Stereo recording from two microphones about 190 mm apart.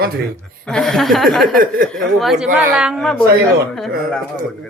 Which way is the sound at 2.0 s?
Centre (ahead or behind).